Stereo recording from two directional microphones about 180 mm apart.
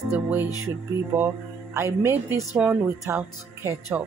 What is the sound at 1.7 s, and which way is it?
Speech, 15° right (ahead or behind).